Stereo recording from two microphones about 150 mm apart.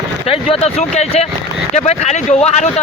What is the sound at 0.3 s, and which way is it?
A man's voice, 40° left (ahead or behind).